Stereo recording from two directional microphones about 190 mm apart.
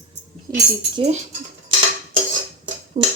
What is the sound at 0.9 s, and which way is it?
Speech, 35° right (ahead or behind).